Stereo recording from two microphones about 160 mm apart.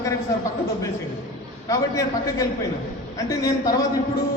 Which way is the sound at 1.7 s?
20° left (ahead or behind).